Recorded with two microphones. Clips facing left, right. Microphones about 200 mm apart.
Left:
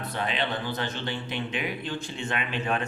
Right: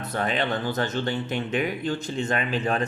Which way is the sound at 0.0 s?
45° right (ahead or behind).